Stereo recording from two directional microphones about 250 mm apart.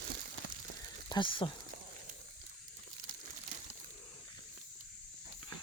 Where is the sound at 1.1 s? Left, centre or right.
Centre.